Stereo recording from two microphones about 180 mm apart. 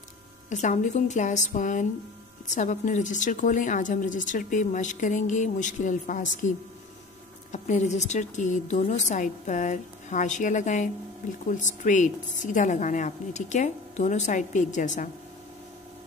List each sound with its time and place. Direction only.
0.5 s a woman's voice: 40° left (ahead or behind)
7.5 s a woman's voice: 40° left (ahead or behind)